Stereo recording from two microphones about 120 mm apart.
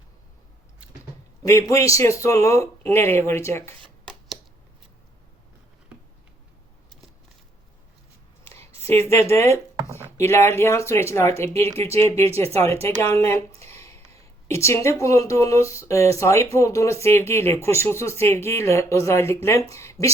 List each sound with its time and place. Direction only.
1.4 s speech: 25° left (ahead or behind)
8.8 s speech: 20° left (ahead or behind)
13.6 s a sound: 25° left (ahead or behind)
14.2 s speech: 25° left (ahead or behind)